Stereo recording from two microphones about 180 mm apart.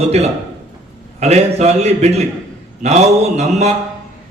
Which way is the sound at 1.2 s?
35° right (ahead or behind).